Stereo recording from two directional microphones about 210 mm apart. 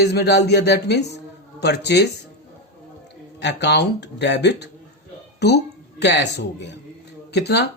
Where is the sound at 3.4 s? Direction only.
55° left (ahead or behind).